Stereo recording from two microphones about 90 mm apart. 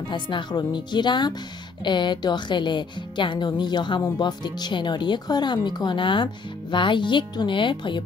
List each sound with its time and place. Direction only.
0.1 s speech: 60° left (ahead or behind)